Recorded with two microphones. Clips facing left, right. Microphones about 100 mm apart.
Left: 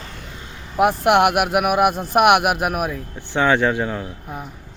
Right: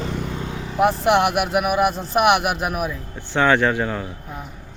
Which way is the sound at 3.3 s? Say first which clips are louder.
Even; 20° left (ahead or behind).